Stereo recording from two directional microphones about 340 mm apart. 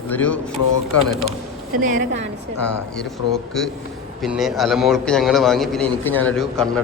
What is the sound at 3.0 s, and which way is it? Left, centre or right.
A man's voice, centre.